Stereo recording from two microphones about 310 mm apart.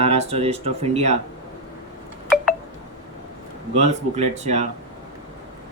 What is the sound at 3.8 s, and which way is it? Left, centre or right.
Speech, right.